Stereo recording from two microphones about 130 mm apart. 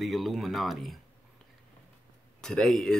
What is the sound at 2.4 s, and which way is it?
Speech, 5° left (ahead or behind).